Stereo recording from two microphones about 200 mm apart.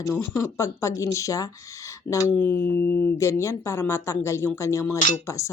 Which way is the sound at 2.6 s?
55° left (ahead or behind).